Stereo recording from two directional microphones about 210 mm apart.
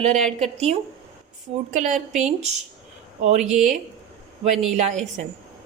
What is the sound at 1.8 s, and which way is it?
A woman's voice, 35° right (ahead or behind).